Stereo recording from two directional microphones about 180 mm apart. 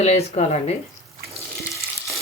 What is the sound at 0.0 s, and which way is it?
Speech, 35° left (ahead or behind).